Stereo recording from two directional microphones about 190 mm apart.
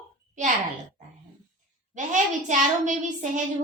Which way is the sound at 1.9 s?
40° right (ahead or behind).